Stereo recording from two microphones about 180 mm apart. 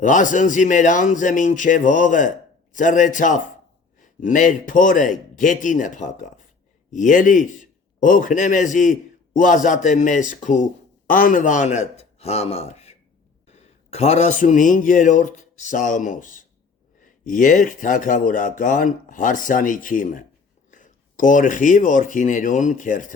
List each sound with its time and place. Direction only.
0.0 s a man's voice: 45° left (ahead or behind)